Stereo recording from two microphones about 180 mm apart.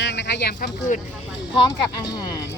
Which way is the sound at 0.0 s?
75° left (ahead or behind).